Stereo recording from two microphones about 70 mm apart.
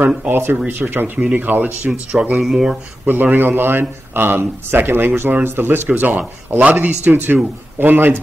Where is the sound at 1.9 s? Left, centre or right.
Centre.